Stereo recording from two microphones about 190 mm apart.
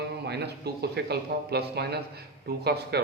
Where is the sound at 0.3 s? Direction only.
60° right (ahead or behind).